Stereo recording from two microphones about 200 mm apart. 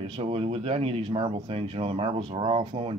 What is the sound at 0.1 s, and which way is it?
Speech, 30° right (ahead or behind).